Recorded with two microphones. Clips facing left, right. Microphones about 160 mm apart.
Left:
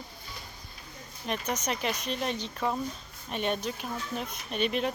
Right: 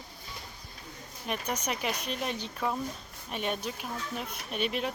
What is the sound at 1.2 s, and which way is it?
Speech, 10° right (ahead or behind).